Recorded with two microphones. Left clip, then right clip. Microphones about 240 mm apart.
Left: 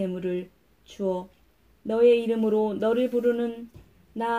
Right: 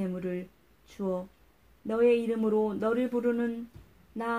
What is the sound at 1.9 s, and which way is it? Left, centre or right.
Speech, right.